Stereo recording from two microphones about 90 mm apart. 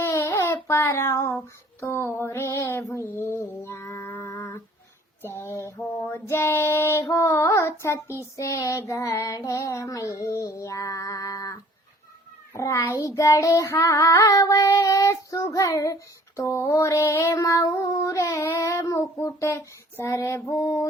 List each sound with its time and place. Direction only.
0.0 s a sound: 35° left (ahead or behind)
0.5 s child singing: 30° left (ahead or behind)
3.2 s music: 30° left (ahead or behind)
3.6 s female singing: 30° left (ahead or behind)
5.2 s child singing: 30° left (ahead or behind)
12.5 s child singing: 35° left (ahead or behind)